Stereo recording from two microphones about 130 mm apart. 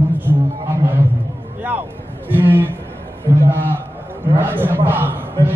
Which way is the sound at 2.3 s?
15° right (ahead or behind).